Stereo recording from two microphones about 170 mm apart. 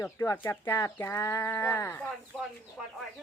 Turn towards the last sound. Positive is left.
turn(degrees=0)  # may be behind; listen again after turning